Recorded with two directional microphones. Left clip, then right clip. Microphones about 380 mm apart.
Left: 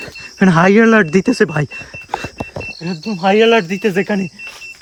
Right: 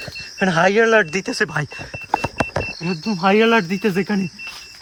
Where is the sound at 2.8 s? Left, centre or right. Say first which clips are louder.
Left 1 dB; centre.